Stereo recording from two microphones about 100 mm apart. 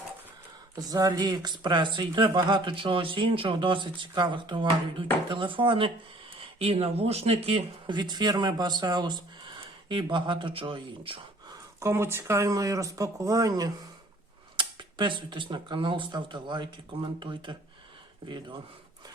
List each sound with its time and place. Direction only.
0.8 s speech: 35° right (ahead or behind); by 5.9 s 60° right (ahead or behind)
6.4 s speech: 75° right (ahead or behind)
7.9 s speech: 50° right (ahead or behind)
11.8 s speech: 25° right (ahead or behind)
14.5 s speech: 55° right (ahead or behind)